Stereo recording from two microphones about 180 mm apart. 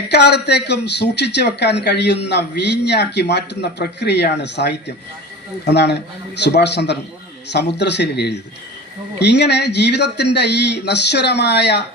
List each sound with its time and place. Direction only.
0.1 s a man's voice: 70° left (ahead or behind)